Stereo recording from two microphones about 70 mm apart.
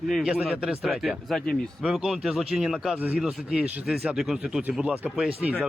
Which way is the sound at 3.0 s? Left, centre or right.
Right.